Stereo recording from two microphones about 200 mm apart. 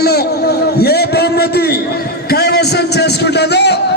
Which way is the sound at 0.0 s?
50° left (ahead or behind).